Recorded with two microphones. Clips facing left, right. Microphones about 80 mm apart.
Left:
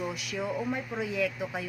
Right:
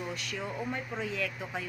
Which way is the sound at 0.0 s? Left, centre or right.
Centre.